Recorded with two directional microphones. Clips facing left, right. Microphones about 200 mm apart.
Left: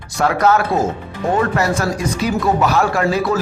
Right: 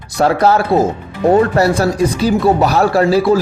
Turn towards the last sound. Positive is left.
turn(degrees=-30)  # may be behind; listen again after turning